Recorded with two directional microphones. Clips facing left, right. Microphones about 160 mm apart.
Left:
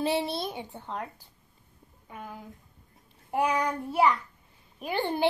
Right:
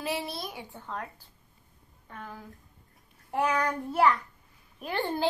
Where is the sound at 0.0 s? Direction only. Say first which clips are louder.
Left 5 dB; 30° left (ahead or behind); by 2.4 s 10° left (ahead or behind).